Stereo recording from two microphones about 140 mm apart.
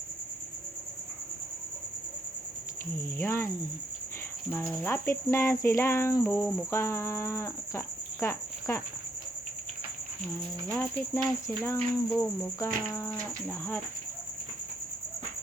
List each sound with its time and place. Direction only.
3.2 s cricket: 20° left (ahead or behind)
4.5 s cricket: 15° left (ahead or behind)
10.7 s cricket: 10° left (ahead or behind)